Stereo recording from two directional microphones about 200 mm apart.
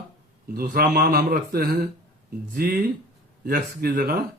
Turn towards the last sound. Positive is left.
turn(degrees=-50)  # may be behind; listen again after turning